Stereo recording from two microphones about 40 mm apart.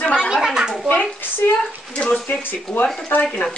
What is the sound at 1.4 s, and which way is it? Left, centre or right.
Speech, left.